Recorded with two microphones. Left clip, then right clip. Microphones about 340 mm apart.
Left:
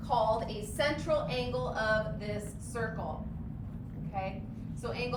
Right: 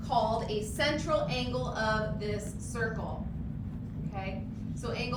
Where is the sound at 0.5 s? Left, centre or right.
Left.